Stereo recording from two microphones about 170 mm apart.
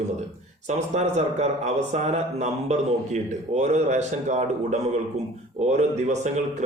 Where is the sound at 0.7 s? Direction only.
40° right (ahead or behind).